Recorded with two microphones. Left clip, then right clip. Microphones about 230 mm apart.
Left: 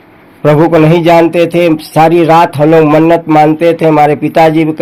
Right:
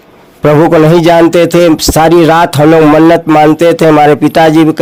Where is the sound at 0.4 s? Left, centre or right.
Right.